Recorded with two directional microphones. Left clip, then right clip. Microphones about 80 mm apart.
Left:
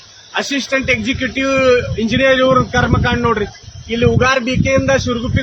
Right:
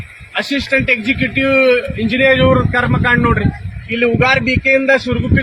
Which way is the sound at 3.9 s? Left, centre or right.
Left.